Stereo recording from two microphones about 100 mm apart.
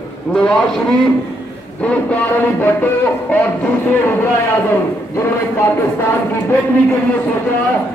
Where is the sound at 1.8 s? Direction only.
15° left (ahead or behind).